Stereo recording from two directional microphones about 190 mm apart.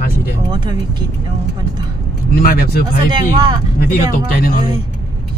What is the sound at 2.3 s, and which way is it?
Speech, 50° left (ahead or behind).